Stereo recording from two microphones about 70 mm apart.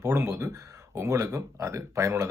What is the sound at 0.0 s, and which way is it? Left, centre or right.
Speech, right.